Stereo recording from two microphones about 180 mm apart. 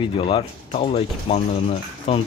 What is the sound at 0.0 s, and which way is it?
Speech, 30° left (ahead or behind).